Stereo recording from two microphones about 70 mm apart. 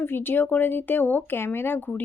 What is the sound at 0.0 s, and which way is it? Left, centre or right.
Speech, left.